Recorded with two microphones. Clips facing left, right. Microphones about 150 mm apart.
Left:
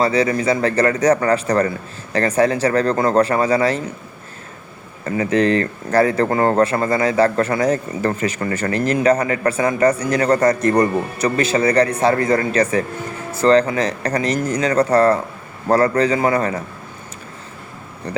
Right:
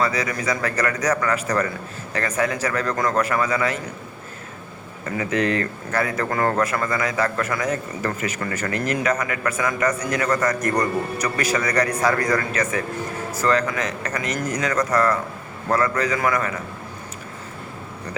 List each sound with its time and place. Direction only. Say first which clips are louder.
0.0 s speech: left 7 dB; 30° left (ahead or behind)
5.0 s speech: left 6 dB; 35° left (ahead or behind)
18.1 s speech: left 7 dB; 30° left (ahead or behind)